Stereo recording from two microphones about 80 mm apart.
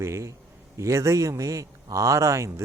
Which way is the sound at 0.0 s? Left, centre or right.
Right.